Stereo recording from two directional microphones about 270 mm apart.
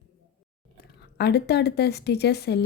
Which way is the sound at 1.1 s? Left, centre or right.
Left.